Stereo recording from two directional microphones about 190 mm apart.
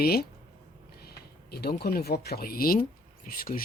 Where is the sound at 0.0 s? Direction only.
55° left (ahead or behind).